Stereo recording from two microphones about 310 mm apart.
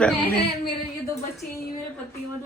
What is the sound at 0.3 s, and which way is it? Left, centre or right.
Speech, left.